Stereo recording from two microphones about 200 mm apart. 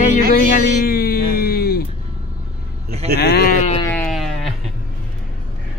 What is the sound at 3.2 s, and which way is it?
Sheep, 55° left (ahead or behind).